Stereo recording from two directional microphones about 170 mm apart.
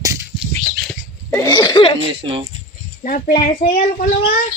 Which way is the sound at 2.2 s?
30° right (ahead or behind).